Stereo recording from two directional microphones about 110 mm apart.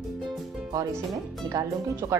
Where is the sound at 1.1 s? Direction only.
30° right (ahead or behind).